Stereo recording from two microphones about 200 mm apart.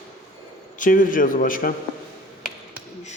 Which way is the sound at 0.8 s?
40° left (ahead or behind).